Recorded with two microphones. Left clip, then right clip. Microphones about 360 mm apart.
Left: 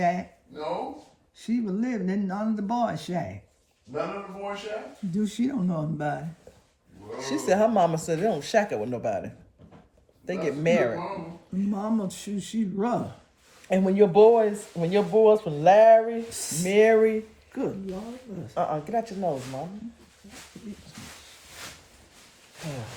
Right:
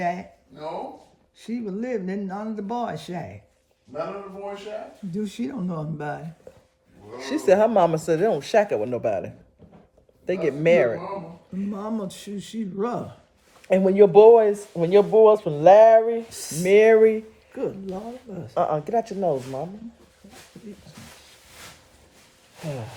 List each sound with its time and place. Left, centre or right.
0.0 s speech: centre
1.4 s speech: centre
5.1 s speech: centre
7.2 s speech: right
11.7 s speech: centre
13.7 s speech: right
16.3 s speech: centre
16.6 s speech: right
18.4 s speech: right